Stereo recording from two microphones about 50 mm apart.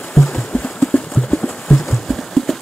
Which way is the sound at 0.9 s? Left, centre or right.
Left.